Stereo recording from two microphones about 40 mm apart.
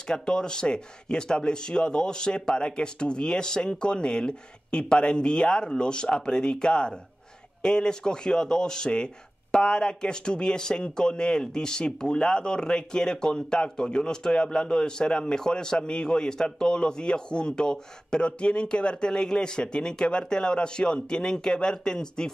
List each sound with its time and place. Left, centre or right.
0.1 s speech: centre